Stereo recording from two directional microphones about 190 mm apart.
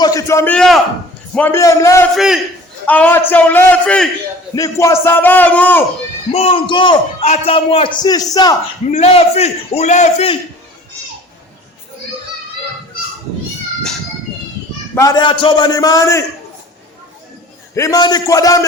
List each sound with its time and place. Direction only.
0.0 s a man's voice: 20° left (ahead or behind)
2.1 s a man's voice: centre (ahead or behind)
4.5 s a man's voice: 15° left (ahead or behind)
6.3 s a man's voice: 30° left (ahead or behind)
8.9 s a man's voice: 35° left (ahead or behind)
14.9 s a man's voice: 20° left (ahead or behind)
17.7 s a man's voice: 20° left (ahead or behind)